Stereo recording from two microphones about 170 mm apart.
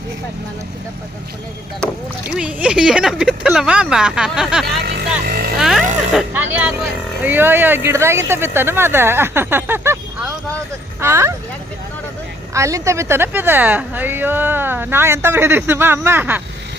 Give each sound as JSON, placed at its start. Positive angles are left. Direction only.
{"t": 2.3, "sound": "speech", "side_deg": -5}
{"t": 5.2, "sound": "speech", "side_deg": -60}
{"t": 5.5, "sound": "speech", "side_deg": 0}
{"t": 11.0, "sound": "speech", "side_deg": -15}
{"t": 12.5, "sound": "speech", "side_deg": -20}